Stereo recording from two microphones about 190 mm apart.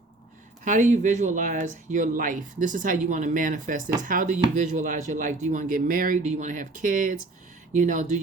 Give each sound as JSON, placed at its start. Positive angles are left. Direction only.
{"t": 0.6, "sound": "speech", "side_deg": -40}